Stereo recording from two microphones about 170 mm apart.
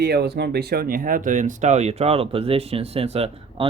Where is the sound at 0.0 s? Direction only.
70° right (ahead or behind).